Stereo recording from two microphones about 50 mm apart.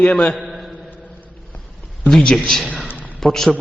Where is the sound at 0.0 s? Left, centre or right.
Left.